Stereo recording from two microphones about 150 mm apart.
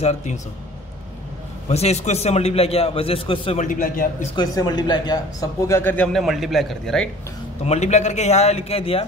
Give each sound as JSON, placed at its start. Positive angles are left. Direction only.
{"t": 0.0, "sound": "a man's voice", "side_deg": 50}
{"t": 1.7, "sound": "a man's voice", "side_deg": 45}
{"t": 3.6, "sound": "speech", "side_deg": 65}
{"t": 4.4, "sound": "speech", "side_deg": 30}
{"t": 6.1, "sound": "speech", "side_deg": 0}
{"t": 7.6, "sound": "a man's voice", "side_deg": 45}